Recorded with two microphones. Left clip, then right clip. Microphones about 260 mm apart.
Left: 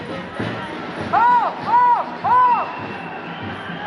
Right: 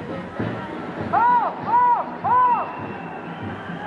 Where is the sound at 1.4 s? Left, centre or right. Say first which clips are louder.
Left 3 dB; right.